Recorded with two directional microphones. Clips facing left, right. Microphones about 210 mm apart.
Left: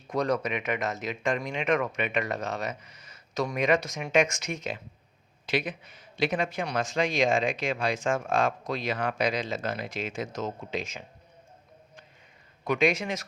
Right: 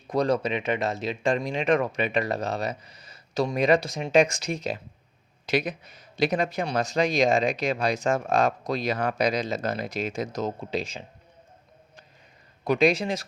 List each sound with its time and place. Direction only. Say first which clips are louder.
0.1 s speech: right 3 dB; 30° right (ahead or behind)
12.6 s speech: right 4 dB; 35° right (ahead or behind)